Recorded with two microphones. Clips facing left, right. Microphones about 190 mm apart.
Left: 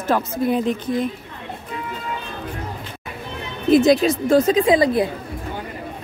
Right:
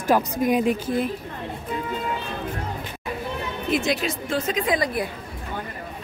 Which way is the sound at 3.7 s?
40° left (ahead or behind).